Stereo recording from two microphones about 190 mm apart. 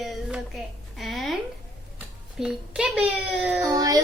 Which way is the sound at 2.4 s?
5° right (ahead or behind).